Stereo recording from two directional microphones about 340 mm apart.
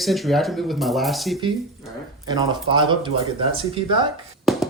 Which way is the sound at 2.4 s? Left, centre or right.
Centre.